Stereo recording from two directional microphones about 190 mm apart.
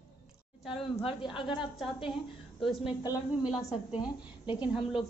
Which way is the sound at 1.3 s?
25° left (ahead or behind).